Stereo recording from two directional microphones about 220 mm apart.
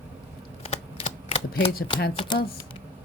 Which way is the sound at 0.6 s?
25° left (ahead or behind).